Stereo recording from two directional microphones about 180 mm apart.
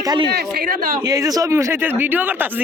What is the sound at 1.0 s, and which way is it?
Speech, 20° right (ahead or behind).